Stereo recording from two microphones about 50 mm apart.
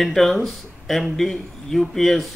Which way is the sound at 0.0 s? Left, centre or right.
Centre.